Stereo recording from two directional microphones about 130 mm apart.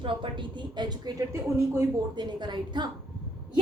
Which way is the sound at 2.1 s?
35° right (ahead or behind).